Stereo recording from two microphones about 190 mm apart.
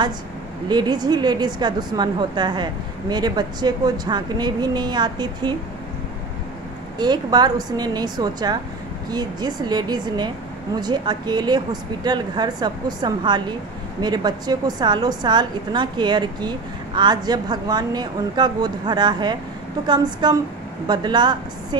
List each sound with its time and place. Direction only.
0.7 s a woman's voice: 20° right (ahead or behind)
7.0 s a woman's voice: 20° right (ahead or behind)